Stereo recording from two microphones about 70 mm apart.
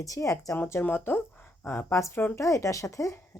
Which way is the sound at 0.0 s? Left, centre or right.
Left.